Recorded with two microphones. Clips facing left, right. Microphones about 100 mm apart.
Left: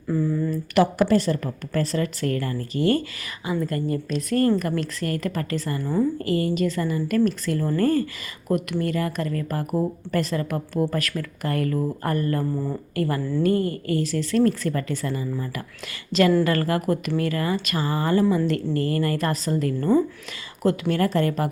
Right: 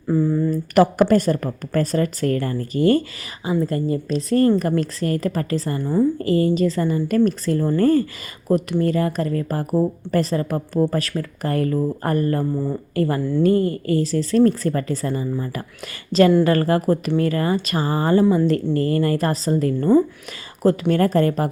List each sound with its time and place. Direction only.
0.1 s a woman's voice: 30° right (ahead or behind)
7.6 s a woman's voice: 25° right (ahead or behind)
12.5 s speech: 15° right (ahead or behind)
13.0 s a woman's voice: 30° right (ahead or behind)